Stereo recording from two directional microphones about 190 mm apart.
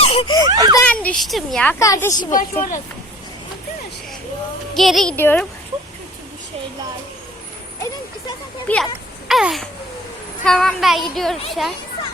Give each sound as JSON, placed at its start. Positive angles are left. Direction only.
{"t": 0.0, "sound": "giggle", "side_deg": 30}
{"t": 0.4, "sound": "a child's voice", "side_deg": -20}
{"t": 0.9, "sound": "a woman's voice", "side_deg": 5}
{"t": 1.8, "sound": "a woman's voice", "side_deg": 15}
{"t": 2.3, "sound": "speech", "side_deg": 45}
{"t": 4.7, "sound": "a woman's voice", "side_deg": 0}
{"t": 8.6, "sound": "speech", "side_deg": 5}
{"t": 9.2, "sound": "babbling", "side_deg": 0}
{"t": 10.4, "sound": "speech", "side_deg": 5}